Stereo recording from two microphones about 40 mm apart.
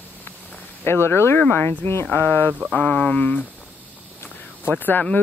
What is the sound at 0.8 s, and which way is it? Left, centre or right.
Speech, left.